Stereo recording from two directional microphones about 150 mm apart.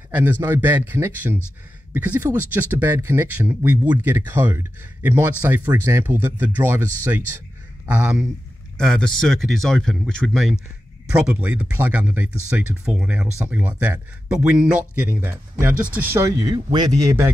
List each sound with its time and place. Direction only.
0.1 s speech: 10° right (ahead or behind)
7.9 s speech: 5° right (ahead or behind)